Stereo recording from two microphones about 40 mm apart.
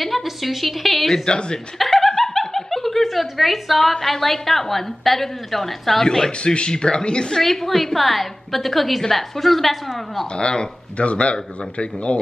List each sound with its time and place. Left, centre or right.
0.0 s a woman's voice: centre
1.1 s a woman's voice: centre
1.8 s snicker: centre
3.9 s a woman's voice: centre
6.4 s speech: left
7.3 s a woman's voice: centre
10.3 s speech: left